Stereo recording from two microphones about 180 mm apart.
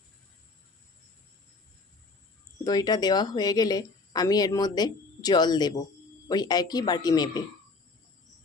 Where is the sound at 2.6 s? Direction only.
20° left (ahead or behind).